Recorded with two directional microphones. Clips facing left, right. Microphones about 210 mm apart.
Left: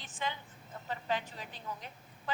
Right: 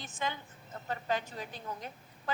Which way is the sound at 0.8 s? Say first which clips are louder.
Right 2 dB; 45° right (ahead or behind).